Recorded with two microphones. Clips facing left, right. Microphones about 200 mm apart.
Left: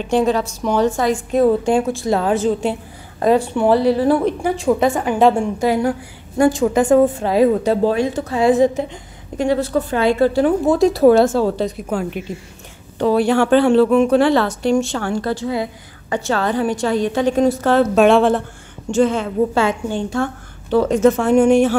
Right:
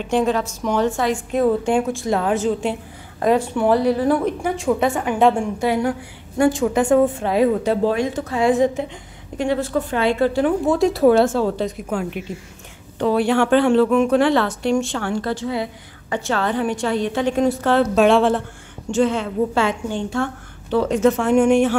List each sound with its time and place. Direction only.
0.0 s a woman's voice: 35° left (ahead or behind)